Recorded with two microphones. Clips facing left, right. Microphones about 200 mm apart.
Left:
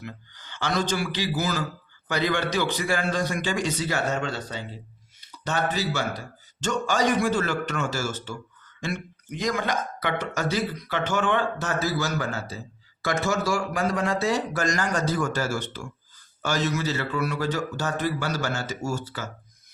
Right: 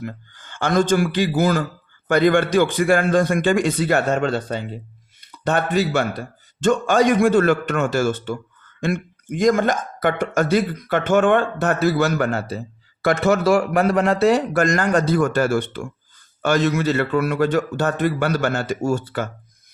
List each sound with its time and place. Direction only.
0.0 s a man's voice: 50° right (ahead or behind)